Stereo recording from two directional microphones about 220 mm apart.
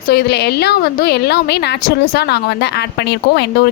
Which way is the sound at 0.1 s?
50° left (ahead or behind).